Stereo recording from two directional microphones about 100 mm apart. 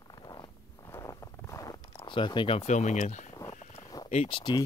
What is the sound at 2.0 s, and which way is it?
Speech, 55° left (ahead or behind).